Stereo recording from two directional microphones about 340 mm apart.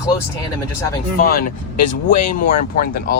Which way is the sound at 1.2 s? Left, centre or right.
Left.